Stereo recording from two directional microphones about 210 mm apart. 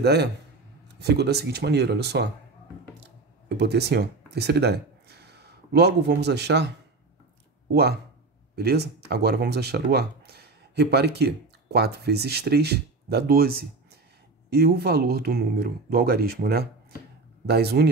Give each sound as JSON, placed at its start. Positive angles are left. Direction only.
{"t": 0.0, "sound": "speech", "side_deg": -50}
{"t": 3.0, "sound": "a sound", "side_deg": -55}
{"t": 8.5, "sound": "speech", "side_deg": -50}